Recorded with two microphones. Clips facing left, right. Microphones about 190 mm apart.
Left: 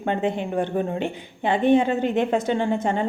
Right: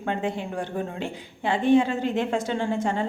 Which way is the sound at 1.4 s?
20° left (ahead or behind).